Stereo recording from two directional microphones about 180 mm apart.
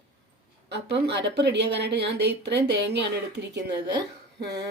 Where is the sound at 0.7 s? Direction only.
70° right (ahead or behind).